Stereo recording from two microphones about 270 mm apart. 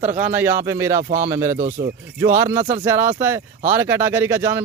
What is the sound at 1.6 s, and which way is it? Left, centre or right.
Speech, right.